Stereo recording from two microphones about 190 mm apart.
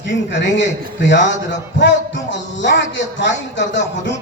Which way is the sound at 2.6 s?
70° left (ahead or behind).